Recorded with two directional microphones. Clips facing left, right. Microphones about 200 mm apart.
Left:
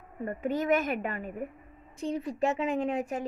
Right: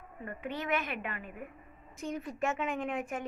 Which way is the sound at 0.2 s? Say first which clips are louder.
Left 8 dB; 40° left (ahead or behind).